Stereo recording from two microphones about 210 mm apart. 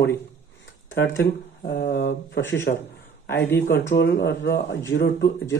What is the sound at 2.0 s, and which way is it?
Speech, 60° left (ahead or behind).